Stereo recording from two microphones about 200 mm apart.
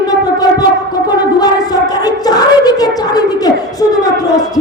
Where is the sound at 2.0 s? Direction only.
20° left (ahead or behind).